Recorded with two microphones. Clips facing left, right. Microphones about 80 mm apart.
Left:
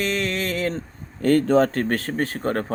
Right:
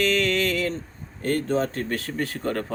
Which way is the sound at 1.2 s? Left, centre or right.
Left.